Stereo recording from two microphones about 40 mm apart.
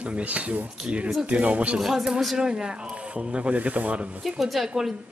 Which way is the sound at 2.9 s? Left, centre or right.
Right.